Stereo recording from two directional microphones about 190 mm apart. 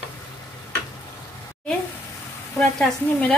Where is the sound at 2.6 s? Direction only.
Centre (ahead or behind).